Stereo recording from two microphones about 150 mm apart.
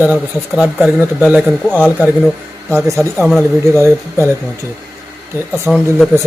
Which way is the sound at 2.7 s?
20° right (ahead or behind).